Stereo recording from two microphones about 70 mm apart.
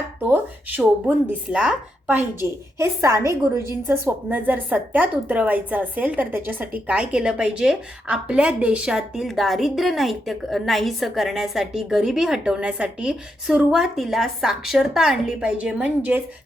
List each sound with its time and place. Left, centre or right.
0.8 s a woman's voice: centre
2.4 s a woman's voice: right; by 16.2 s centre